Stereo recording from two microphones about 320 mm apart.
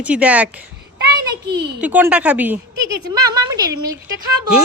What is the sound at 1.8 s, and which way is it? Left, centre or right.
A woman's voice, centre.